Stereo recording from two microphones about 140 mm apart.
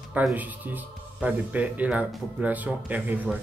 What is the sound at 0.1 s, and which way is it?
Speech, 10° right (ahead or behind).